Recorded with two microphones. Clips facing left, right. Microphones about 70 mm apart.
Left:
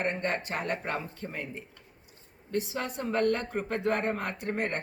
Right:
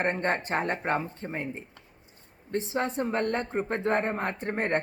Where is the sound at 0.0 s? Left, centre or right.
Right.